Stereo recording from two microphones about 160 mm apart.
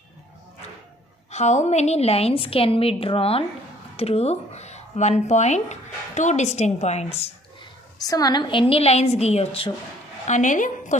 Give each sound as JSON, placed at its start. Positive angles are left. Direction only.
{"t": 1.3, "sound": "a woman's voice", "side_deg": 45}
{"t": 8.0, "sound": "a woman's voice", "side_deg": 25}
{"t": 10.2, "sound": "a woman's voice", "side_deg": 50}